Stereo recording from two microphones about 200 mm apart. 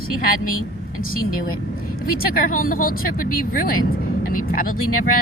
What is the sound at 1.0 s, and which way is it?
Speech, 45° left (ahead or behind).